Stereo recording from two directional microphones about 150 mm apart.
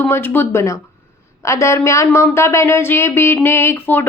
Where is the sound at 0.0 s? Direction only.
15° left (ahead or behind).